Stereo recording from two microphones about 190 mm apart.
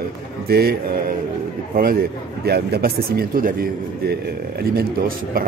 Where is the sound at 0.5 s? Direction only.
55° right (ahead or behind).